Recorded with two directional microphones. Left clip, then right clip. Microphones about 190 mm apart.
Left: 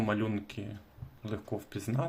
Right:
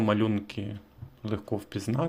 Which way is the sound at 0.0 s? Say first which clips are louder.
Right 6 dB; 30° right (ahead or behind).